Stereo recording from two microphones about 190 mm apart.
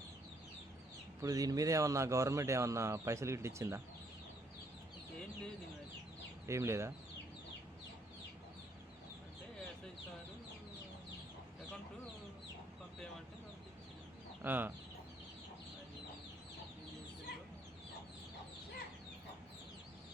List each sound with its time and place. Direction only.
1.2 s speech: 20° right (ahead or behind)
6.5 s speech: 15° right (ahead or behind)
14.4 s speech: 10° right (ahead or behind)